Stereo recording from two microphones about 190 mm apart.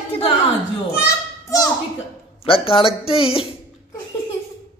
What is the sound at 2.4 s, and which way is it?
Speech, 30° left (ahead or behind).